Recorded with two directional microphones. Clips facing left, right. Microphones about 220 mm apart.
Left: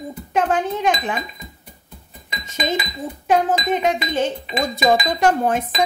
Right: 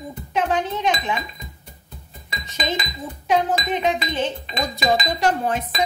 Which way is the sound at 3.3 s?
45° left (ahead or behind).